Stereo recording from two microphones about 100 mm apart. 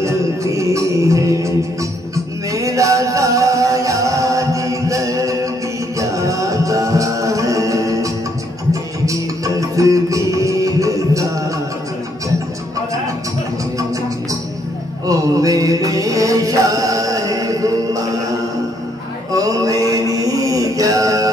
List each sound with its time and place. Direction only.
0.0 s music: 30° right (ahead or behind)
15.0 s music: 35° right (ahead or behind)
19.3 s mantra: 35° right (ahead or behind)